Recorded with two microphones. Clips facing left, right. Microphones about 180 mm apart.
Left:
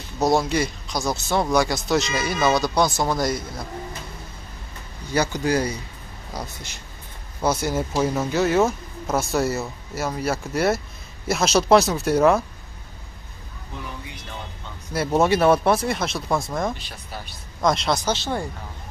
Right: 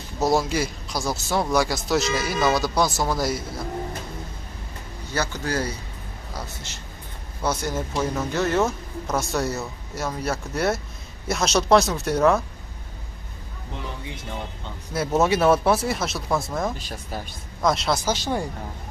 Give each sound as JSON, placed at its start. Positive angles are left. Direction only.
{"t": 0.2, "sound": "speech", "side_deg": -5}
{"t": 5.1, "sound": "speech", "side_deg": 15}
{"t": 14.9, "sound": "speech", "side_deg": 0}
{"t": 16.7, "sound": "speech", "side_deg": -45}
{"t": 17.6, "sound": "speech", "side_deg": 0}